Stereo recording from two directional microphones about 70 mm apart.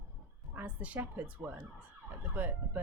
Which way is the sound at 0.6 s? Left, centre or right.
Right.